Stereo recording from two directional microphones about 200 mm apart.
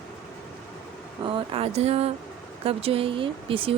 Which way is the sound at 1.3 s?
30° right (ahead or behind).